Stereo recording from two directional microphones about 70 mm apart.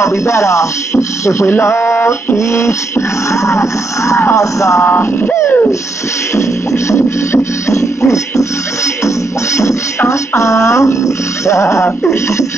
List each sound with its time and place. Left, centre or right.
0.0 s speech: left
2.3 s music: left
4.8 s music: left
6.3 s music: left
9.6 s music: left